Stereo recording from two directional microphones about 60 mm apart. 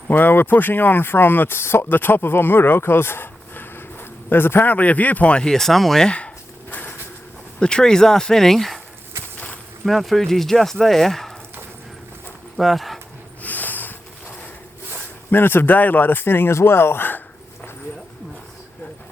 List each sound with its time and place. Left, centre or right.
0.1 s speech: left
4.7 s speech: left; by 6.1 s centre
6.1 s a sound: centre
7.6 s speech: centre
9.8 s speech: centre
12.5 s speech: centre
13.4 s a sound: left
15.3 s speech: left